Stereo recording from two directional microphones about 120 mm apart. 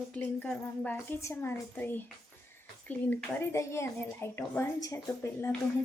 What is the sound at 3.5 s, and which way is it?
A child's voice, 20° left (ahead or behind).